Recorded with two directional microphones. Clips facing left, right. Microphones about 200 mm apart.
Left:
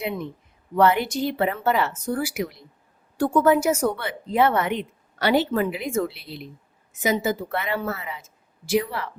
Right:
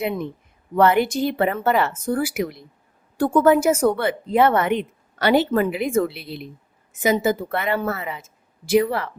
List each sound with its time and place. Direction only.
0.8 s a woman's voice: 50° right (ahead or behind)